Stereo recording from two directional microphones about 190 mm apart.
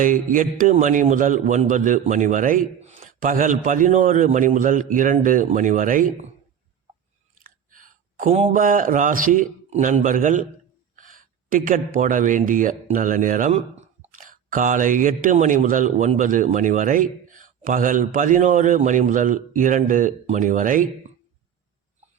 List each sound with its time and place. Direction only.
0.0 s speech: 45° right (ahead or behind)
7.4 s speech: 45° right (ahead or behind)